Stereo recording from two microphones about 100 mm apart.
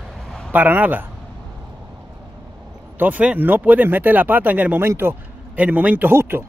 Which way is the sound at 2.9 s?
15° right (ahead or behind).